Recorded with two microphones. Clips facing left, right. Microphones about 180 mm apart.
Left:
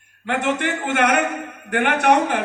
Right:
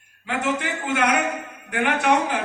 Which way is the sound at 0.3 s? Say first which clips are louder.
Left 3 dB; 65° left (ahead or behind).